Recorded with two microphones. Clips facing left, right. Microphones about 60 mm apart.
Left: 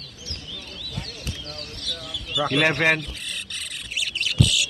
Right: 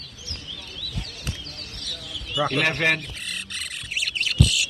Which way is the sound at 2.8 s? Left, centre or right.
Centre.